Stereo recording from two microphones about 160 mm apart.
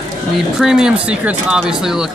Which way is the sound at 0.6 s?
5° right (ahead or behind).